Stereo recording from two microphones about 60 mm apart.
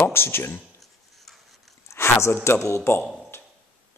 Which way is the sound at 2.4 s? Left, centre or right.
Left.